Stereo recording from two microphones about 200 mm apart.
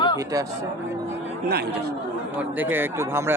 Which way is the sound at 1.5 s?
55° right (ahead or behind).